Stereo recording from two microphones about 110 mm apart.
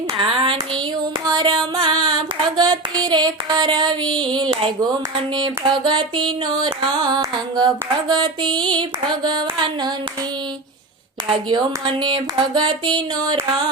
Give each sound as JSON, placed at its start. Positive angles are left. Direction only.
{"t": 0.2, "sound": "hands", "side_deg": -55}
{"t": 1.3, "sound": "child singing", "side_deg": -40}
{"t": 5.4, "sound": "music", "side_deg": -45}
{"t": 11.4, "sound": "music", "side_deg": -45}